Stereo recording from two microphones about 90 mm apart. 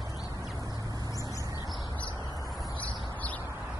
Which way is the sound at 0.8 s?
45° right (ahead or behind).